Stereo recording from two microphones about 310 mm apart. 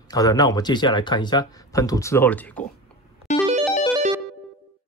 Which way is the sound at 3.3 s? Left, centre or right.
Left.